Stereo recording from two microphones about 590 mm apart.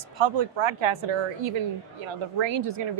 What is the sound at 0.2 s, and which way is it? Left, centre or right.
A woman's voice, right.